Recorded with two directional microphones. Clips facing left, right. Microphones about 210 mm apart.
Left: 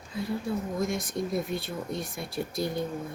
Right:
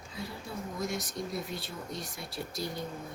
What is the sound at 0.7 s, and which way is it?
Speech, 55° left (ahead or behind).